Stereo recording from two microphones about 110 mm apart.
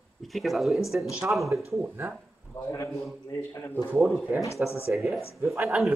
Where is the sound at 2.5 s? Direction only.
25° left (ahead or behind).